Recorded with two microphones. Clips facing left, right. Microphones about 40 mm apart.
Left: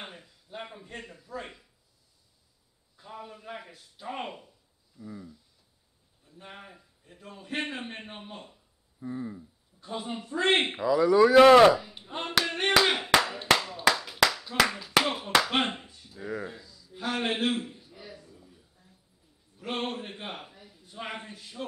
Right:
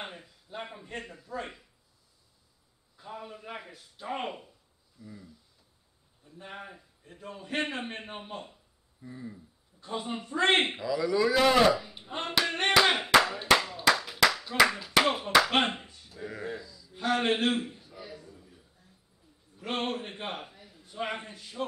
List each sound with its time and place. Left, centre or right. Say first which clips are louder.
0.0 s a man's voice: right 2 dB; centre
3.0 s a man's voice: right 1 dB; centre
6.3 s a man's voice: right 3 dB; centre
9.0 s speech: left 7 dB; left
9.8 s a man's voice: right 1 dB; centre
10.8 s speech: left 6 dB; left
11.7 s speech: left 1 dB; centre
12.0 s speech: even; centre
12.4 s hands: right 1 dB; centre
13.9 s clapping: even; centre
15.0 s a man's voice: right 2 dB; centre
18.2 s a sound: right 2 dB; centre
19.5 s a man's voice: right 1 dB; centre